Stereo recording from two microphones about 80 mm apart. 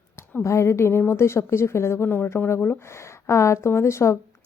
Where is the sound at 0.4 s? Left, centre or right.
Left.